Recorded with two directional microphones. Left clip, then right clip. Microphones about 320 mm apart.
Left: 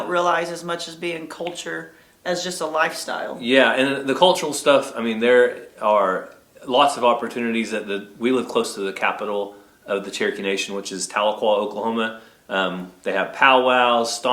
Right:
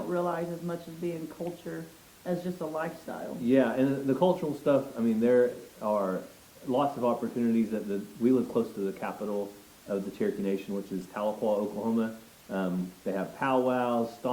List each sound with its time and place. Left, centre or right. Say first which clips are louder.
0.0 s speech: left 11 dB; centre
9.9 s speech: left 8 dB; centre
11.3 s speech: left 8 dB; left
11.9 s speech: left 9 dB; centre